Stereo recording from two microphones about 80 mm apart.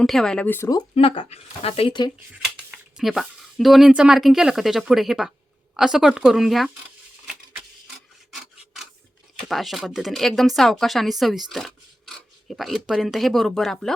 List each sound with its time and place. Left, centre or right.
0.0 s speech: centre
0.4 s speech: left
2.0 s speech: left
3.0 s speech: centre
8.3 s filing: centre
9.5 s speech: centre